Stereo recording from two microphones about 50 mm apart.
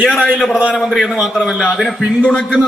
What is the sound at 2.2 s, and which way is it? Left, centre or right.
Speech, centre.